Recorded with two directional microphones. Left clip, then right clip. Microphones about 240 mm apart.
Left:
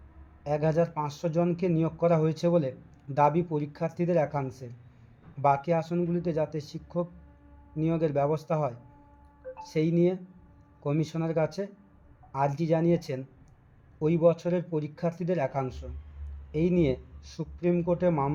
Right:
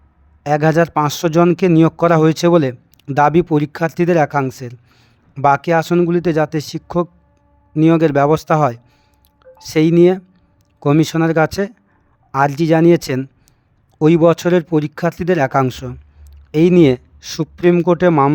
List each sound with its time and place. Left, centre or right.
0.4 s speech: right